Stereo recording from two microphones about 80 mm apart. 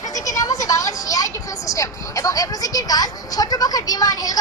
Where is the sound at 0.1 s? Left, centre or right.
Left.